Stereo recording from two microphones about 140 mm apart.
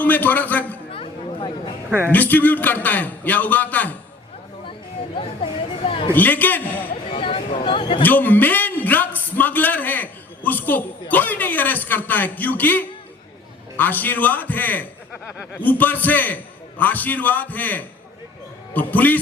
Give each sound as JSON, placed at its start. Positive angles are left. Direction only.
{"t": 0.0, "sound": "a man's voice", "side_deg": 10}
{"t": 0.9, "sound": "chatter", "side_deg": 40}
{"t": 1.9, "sound": "a man's voice", "side_deg": -15}
{"t": 2.1, "sound": "a man's voice", "side_deg": 10}
{"t": 5.1, "sound": "speech", "side_deg": 40}
{"t": 6.1, "sound": "a man's voice", "side_deg": 15}
{"t": 6.8, "sound": "speech", "side_deg": 40}
{"t": 8.0, "sound": "a man's voice", "side_deg": 15}